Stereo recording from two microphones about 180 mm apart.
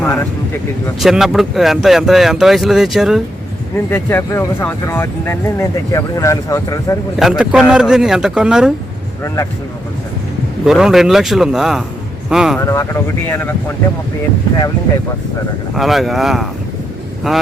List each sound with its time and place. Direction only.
0.0 s speech: 10° left (ahead or behind)
0.9 s speech: centre (ahead or behind)
3.8 s speech: 10° left (ahead or behind)
7.2 s speech: centre (ahead or behind)
9.2 s speech: 15° left (ahead or behind)
10.7 s speech: centre (ahead or behind)
12.5 s speech: 15° left (ahead or behind)
15.7 s speech: centre (ahead or behind)